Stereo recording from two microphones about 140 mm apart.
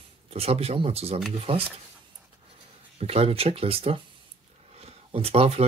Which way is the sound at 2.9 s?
45° right (ahead or behind).